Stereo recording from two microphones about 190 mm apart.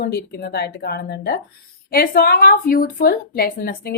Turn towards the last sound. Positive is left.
turn(degrees=50)  # may be behind; listen again after turning